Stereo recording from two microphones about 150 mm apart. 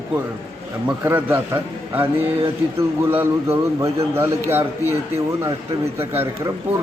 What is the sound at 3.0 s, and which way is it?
A man's voice, 15° right (ahead or behind).